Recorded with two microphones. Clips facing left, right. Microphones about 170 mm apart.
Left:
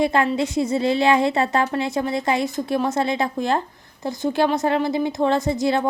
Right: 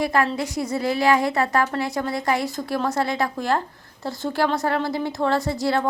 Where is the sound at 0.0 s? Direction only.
25° left (ahead or behind).